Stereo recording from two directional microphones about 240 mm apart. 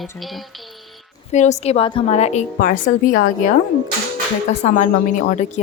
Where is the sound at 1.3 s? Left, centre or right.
Left.